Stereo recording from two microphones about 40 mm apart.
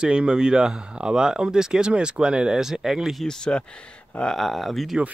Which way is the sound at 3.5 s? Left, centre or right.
Left.